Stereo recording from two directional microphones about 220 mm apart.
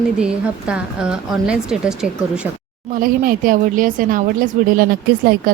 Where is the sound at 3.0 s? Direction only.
40° right (ahead or behind).